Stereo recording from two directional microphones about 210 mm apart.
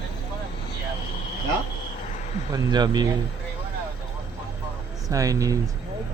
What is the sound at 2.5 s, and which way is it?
Speech, 20° right (ahead or behind).